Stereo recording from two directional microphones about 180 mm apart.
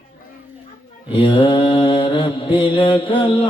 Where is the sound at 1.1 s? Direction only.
30° left (ahead or behind).